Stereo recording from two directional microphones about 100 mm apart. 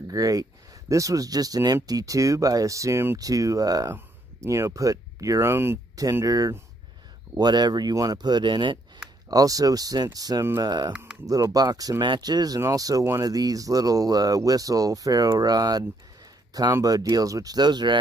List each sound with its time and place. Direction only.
0.1 s speech: 35° right (ahead or behind)
6.2 s speech: 35° right (ahead or behind)
9.3 s speech: 35° right (ahead or behind)